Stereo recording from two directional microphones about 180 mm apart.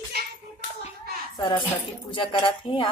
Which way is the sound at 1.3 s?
25° left (ahead or behind).